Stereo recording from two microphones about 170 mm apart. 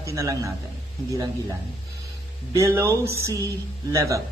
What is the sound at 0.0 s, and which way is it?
Speech, 20° right (ahead or behind).